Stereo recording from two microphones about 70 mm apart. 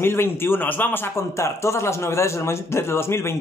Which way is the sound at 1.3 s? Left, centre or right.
Left.